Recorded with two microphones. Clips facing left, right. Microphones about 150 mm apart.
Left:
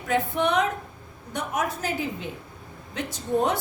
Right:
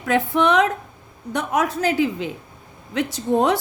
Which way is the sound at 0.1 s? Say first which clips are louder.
Right 5 dB; 90° right.